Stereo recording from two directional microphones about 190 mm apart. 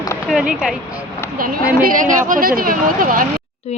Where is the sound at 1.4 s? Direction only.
50° right (ahead or behind).